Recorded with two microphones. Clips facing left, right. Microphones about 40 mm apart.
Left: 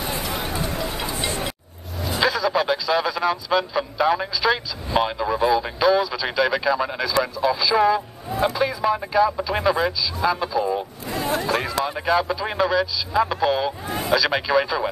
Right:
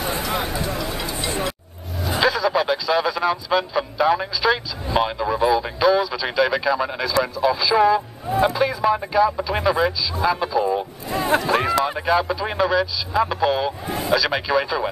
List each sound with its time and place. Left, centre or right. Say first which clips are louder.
0.0 s a sound: right 3 dB; right
0.9 s music: even; left
2.0 s a man's voice: right 2 dB; centre
11.1 s speech: right 3 dB; right
11.6 s a man's voice: right 4 dB; centre
12.1 s speech: left 2 dB; centre